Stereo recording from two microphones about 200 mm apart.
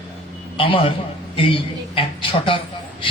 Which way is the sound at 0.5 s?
25° left (ahead or behind).